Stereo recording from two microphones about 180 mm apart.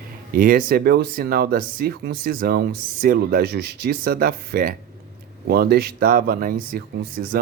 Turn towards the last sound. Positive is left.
turn(degrees=-55)  # may be behind; listen again after turning